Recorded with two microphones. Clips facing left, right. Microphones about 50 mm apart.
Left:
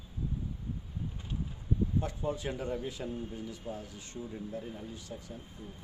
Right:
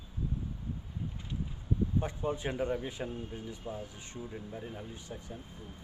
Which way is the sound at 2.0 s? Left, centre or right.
Right.